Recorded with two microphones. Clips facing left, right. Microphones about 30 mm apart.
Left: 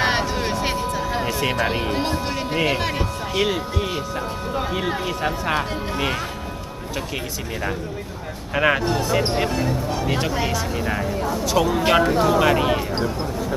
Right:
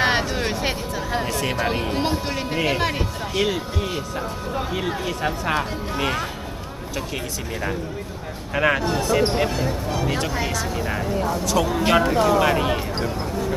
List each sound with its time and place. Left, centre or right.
0.0 s music: centre
2.0 s speech: centre
8.5 s speech: centre